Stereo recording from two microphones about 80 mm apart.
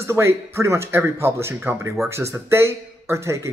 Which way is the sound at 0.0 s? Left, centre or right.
Right.